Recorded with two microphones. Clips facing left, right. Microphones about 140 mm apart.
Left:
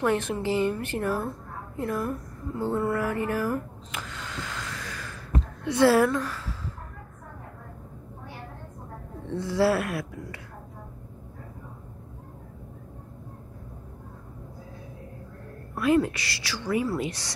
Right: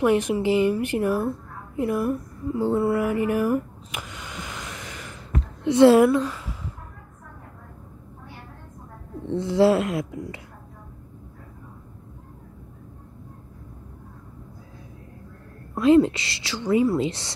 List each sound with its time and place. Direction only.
0.0 s a woman's voice: 15° right (ahead or behind)
1.8 s a sound: 15° right (ahead or behind)
5.6 s a woman's voice: 20° right (ahead or behind)
9.3 s a woman's voice: 20° right (ahead or behind)
15.7 s a woman's voice: 25° right (ahead or behind)